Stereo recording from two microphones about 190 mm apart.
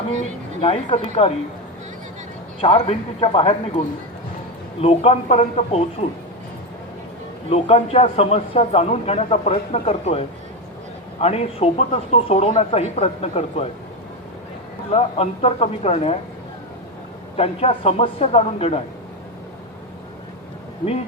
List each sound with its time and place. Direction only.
0.6 s a man's voice: 30° left (ahead or behind)
2.6 s a man's voice: 30° left (ahead or behind)
7.5 s a man's voice: 30° left (ahead or behind)
14.8 s a man's voice: 30° left (ahead or behind)
17.3 s a man's voice: 30° left (ahead or behind)